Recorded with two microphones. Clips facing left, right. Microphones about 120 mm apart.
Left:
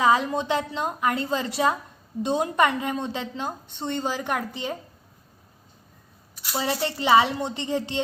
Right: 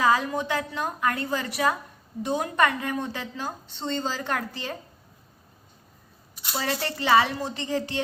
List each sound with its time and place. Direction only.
0.0 s a woman's voice: 25° left (ahead or behind)
6.5 s a woman's voice: 20° left (ahead or behind)